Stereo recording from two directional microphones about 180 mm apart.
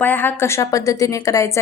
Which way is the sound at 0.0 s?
10° left (ahead or behind).